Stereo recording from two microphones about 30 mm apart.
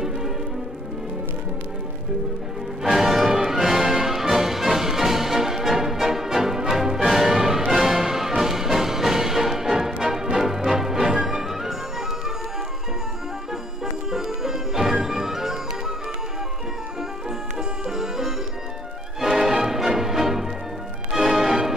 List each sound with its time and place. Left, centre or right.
2.8 s music: centre
14.1 s music: centre
17.8 s music: centre